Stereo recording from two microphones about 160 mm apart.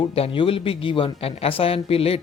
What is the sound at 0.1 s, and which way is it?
Speech, 35° left (ahead or behind).